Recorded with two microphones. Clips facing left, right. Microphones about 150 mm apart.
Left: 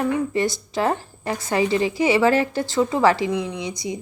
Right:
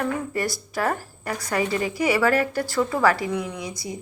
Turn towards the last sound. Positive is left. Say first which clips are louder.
# left 4 dB
turn(degrees=20)  # may be behind; listen again after turning